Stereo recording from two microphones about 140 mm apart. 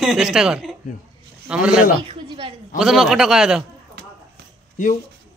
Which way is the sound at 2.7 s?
Centre (ahead or behind).